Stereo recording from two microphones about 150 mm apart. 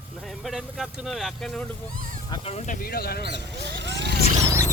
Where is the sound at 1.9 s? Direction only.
65° right (ahead or behind).